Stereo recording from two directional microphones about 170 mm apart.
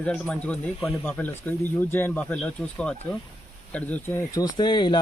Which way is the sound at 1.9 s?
10° left (ahead or behind).